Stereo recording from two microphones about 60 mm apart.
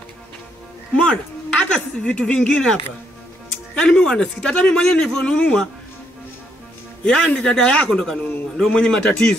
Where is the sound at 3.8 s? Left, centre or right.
Centre.